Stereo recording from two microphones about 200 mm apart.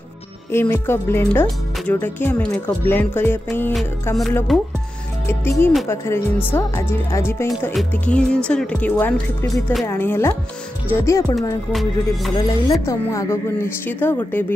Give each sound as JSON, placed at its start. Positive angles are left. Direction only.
{"t": 0.5, "sound": "speech", "side_deg": 10}
{"t": 4.5, "sound": "speech", "side_deg": 0}
{"t": 5.3, "sound": "speech", "side_deg": 10}
{"t": 12.4, "sound": "speech", "side_deg": 20}